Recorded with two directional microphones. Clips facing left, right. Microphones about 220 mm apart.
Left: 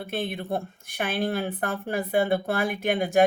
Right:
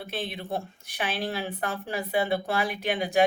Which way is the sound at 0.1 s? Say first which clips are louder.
Left 4 dB; 55° left (ahead or behind).